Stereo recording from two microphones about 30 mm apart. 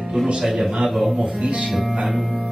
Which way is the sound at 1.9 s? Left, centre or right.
Right.